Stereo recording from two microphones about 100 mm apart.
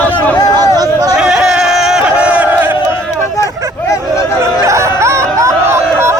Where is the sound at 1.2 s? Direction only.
5° right (ahead or behind).